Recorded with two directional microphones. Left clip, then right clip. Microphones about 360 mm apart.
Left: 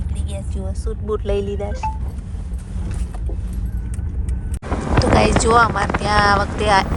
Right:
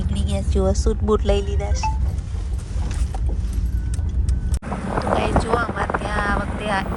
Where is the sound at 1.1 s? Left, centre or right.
Centre.